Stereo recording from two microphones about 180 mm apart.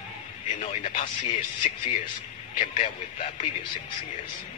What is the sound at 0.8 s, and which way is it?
Speech, 50° left (ahead or behind).